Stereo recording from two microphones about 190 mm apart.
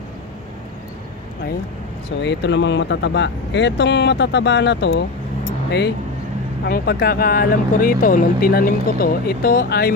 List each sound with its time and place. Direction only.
2.0 s speech: 65° left (ahead or behind)